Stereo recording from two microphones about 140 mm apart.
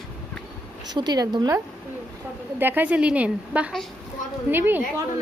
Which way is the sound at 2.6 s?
15° right (ahead or behind).